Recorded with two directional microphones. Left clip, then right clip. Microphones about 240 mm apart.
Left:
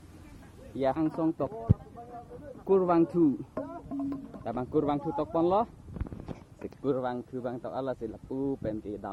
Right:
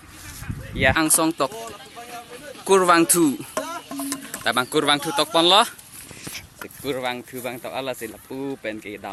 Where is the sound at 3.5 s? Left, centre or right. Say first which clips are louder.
Right 8 dB; right.